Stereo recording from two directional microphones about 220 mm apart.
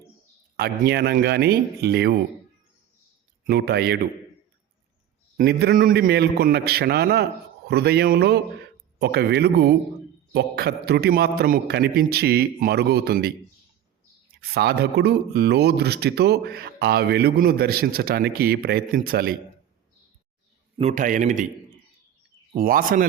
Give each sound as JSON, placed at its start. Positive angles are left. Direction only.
{"t": 0.5, "sound": "speech", "side_deg": -45}
{"t": 3.4, "sound": "speech", "side_deg": -50}
{"t": 5.4, "sound": "speech", "side_deg": -45}
{"t": 14.5, "sound": "speech", "side_deg": -45}
{"t": 20.7, "sound": "a man's voice", "side_deg": -30}
{"t": 22.5, "sound": "a man's voice", "side_deg": -40}